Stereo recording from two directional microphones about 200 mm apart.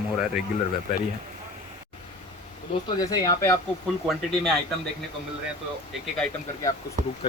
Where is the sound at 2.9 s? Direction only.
20° left (ahead or behind).